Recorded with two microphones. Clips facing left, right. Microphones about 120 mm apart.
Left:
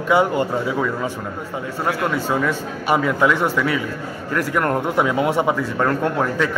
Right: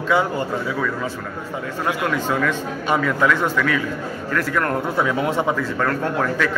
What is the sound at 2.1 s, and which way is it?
A man's voice, 15° left (ahead or behind).